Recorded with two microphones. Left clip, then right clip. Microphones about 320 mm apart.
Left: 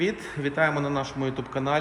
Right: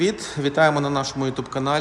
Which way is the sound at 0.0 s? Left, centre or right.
Centre.